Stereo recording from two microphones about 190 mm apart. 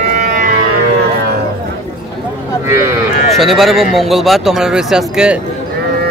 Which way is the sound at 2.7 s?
15° right (ahead or behind).